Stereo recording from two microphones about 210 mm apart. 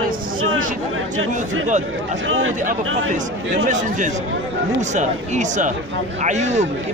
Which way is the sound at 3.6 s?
35° right (ahead or behind).